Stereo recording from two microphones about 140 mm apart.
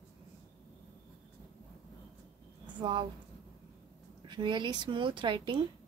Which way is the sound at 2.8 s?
35° right (ahead or behind).